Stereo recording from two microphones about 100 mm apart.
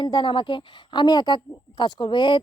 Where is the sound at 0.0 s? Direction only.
55° left (ahead or behind).